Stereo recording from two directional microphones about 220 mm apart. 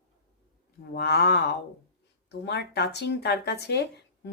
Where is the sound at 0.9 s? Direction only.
50° left (ahead or behind).